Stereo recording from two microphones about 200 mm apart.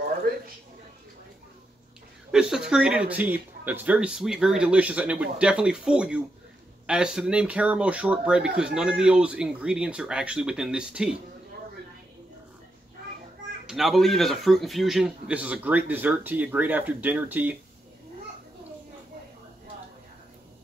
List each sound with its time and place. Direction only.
0.3 s a sound: 50° right (ahead or behind)
2.3 s speech: 5° right (ahead or behind)
13.7 s speech: centre (ahead or behind)